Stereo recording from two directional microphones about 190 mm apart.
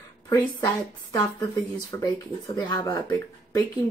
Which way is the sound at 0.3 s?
20° left (ahead or behind).